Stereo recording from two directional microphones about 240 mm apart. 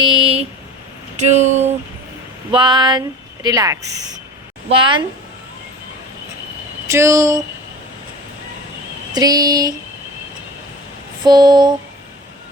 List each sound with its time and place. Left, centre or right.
0.0 s speech: right
6.8 s speech: centre
9.1 s speech: centre
11.2 s speech: centre